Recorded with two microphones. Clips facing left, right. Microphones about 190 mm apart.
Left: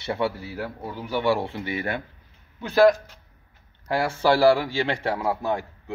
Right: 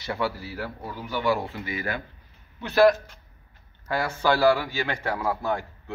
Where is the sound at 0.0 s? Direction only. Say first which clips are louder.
Left 2 dB; 25° left (ahead or behind).